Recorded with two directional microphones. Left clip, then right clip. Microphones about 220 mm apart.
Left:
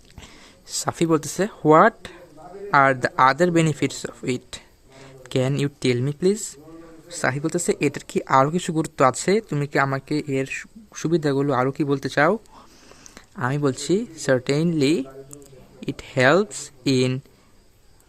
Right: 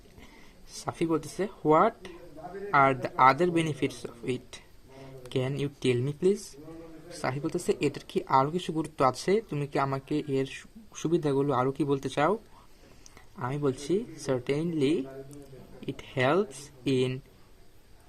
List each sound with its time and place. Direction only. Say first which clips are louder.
0.9 s speech: left 8 dB; 40° left (ahead or behind)